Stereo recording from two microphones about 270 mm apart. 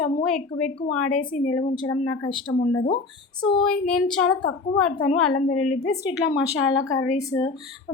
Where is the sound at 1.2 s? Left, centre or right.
Left.